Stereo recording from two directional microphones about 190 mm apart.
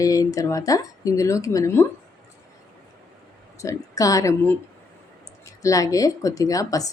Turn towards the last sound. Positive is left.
turn(degrees=20)  # may be behind; listen again after turning